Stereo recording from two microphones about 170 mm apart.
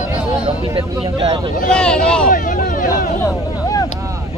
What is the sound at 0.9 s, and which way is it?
Vehicle, 30° right (ahead or behind).